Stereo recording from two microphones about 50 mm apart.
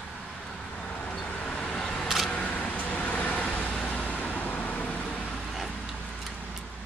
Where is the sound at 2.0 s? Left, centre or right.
Centre.